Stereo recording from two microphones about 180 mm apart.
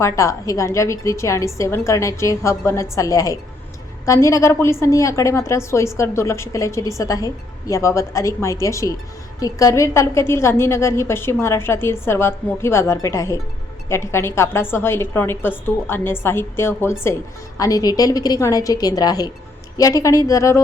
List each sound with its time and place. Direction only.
0.0 s a woman's voice: 15° left (ahead or behind)